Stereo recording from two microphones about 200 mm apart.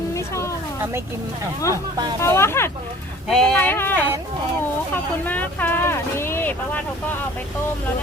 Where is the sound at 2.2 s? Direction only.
15° left (ahead or behind).